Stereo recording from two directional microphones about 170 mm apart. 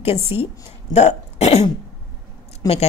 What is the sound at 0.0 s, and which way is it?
A woman's voice, 35° left (ahead or behind).